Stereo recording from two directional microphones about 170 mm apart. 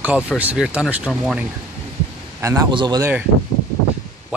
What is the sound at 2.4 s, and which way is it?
Speech, 15° right (ahead or behind).